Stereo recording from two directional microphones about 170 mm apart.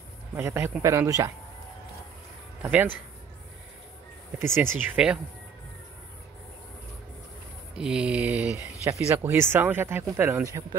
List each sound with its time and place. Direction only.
0.3 s speech: 15° right (ahead or behind)
2.6 s speech: 10° right (ahead or behind)
4.6 s speech: 10° right (ahead or behind)
7.7 s speech: 5° right (ahead or behind)